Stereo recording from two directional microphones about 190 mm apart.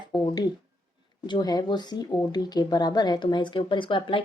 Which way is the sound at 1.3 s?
20° left (ahead or behind).